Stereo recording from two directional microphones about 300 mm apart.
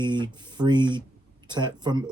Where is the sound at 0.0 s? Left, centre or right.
Centre.